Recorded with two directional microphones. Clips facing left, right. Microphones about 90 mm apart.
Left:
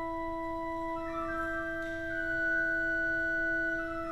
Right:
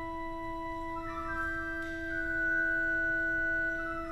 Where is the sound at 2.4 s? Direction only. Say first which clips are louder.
Right 1 dB; 15° left (ahead or behind).